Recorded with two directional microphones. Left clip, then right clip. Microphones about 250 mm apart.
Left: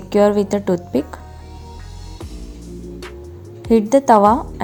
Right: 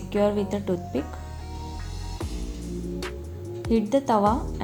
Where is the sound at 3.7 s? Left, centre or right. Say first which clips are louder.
Left 10 dB; left.